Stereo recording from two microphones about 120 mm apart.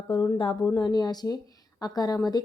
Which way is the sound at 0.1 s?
35° left (ahead or behind).